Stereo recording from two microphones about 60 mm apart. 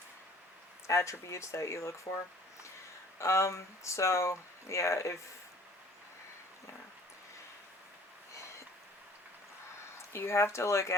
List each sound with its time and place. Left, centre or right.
0.9 s speech: left
10.1 s speech: left